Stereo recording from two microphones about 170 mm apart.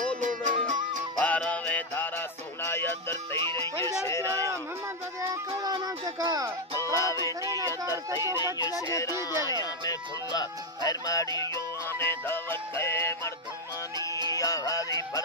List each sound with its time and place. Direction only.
0.2 s music: 45° right (ahead or behind)
1.2 s music: 10° left (ahead or behind)
3.3 s speech: 30° right (ahead or behind)
4.0 s a sound: 15° left (ahead or behind)
4.3 s a sound: 20° right (ahead or behind)
5.6 s music: 25° right (ahead or behind)
6.8 s music: 20° left (ahead or behind)
7.4 s a sound: 20° right (ahead or behind)
8.5 s music: 20° left (ahead or behind)
14.3 s music: 20° left (ahead or behind)